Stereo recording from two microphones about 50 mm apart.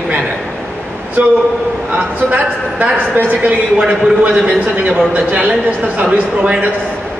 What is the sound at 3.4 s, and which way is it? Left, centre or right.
A man's voice, right.